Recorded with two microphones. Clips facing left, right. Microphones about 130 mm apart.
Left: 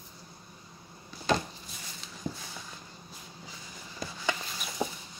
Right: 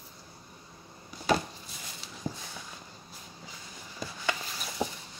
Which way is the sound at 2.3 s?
40° right (ahead or behind).